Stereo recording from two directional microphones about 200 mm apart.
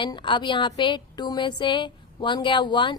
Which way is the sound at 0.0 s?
25° left (ahead or behind).